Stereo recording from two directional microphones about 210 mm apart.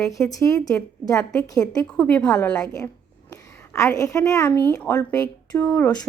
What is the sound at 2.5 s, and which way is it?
A woman's voice, 15° left (ahead or behind).